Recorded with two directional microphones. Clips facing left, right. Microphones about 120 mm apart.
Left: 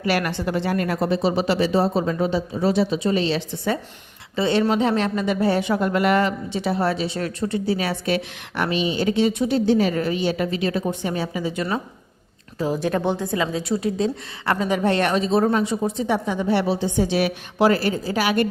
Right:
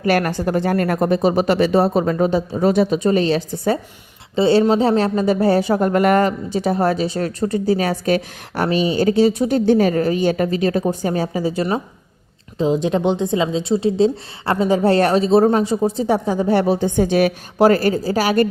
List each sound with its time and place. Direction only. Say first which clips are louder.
0.0 s speech: right 5 dB; 45° right (ahead or behind)
12.5 s speech: right 5 dB; 20° right (ahead or behind); by 18.4 s 40° right (ahead or behind)